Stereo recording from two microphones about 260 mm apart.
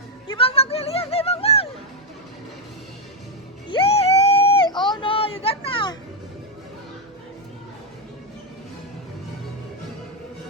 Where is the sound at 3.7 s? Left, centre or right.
Left.